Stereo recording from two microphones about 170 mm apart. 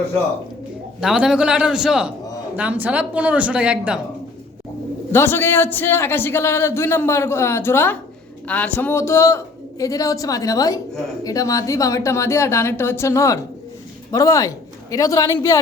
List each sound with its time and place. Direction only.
1.0 s a man's voice: 5° right (ahead or behind)
5.1 s a man's voice: 15° left (ahead or behind)